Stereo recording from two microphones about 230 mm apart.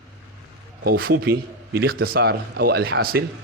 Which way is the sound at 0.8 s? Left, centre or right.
Right.